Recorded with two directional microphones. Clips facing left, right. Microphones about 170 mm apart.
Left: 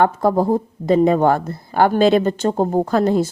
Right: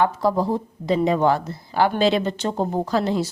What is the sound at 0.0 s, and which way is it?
Speech, 50° left (ahead or behind).